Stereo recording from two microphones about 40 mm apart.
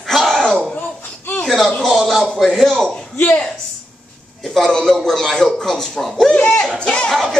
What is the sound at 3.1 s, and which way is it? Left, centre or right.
Speech, left.